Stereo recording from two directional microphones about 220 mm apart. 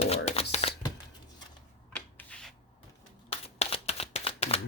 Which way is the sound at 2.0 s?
5° left (ahead or behind).